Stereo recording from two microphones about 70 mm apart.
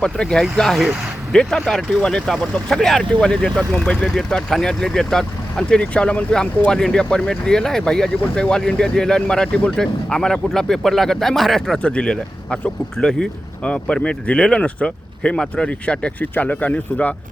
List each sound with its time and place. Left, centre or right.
0.0 s speech: centre
11.8 s speech: centre